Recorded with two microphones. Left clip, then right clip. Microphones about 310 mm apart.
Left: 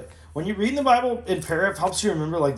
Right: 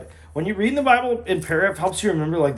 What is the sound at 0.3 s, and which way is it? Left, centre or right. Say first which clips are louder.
Speech: right 3 dB; centre.